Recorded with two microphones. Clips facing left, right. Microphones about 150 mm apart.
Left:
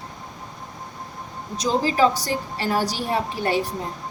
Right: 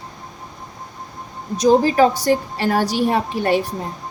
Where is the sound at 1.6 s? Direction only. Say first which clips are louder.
Right 6 dB; 55° right (ahead or behind).